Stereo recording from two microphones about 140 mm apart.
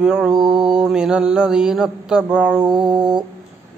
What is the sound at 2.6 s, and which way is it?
Music, 35° right (ahead or behind).